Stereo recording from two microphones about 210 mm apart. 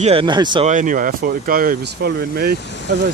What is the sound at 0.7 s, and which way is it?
Speech, 40° right (ahead or behind).